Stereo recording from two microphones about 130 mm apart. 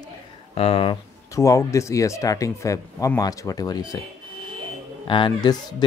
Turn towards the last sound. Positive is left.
turn(degrees=40)  # may be behind; listen again after turning